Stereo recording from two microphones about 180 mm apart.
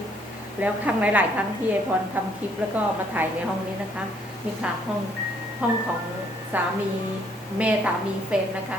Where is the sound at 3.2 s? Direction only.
10° right (ahead or behind).